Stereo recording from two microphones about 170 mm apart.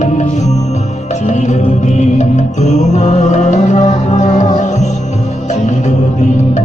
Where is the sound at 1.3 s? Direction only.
45° left (ahead or behind).